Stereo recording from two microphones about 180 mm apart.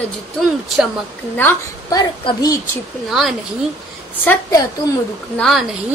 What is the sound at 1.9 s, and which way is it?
Speech, 20° left (ahead or behind).